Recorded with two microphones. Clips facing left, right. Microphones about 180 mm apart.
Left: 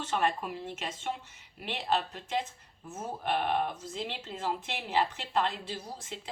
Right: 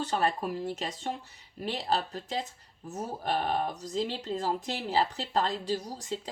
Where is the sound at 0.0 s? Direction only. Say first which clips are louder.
Right 2 dB; 35° right (ahead or behind).